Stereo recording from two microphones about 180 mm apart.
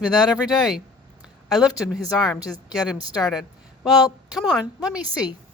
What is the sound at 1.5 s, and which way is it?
A woman's voice, centre (ahead or behind).